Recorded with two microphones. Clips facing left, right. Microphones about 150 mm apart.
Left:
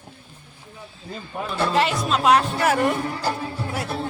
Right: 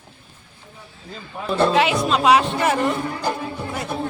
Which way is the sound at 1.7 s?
Centre (ahead or behind).